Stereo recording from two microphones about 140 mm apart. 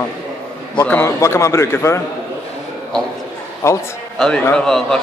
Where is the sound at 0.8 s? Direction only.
15° left (ahead or behind).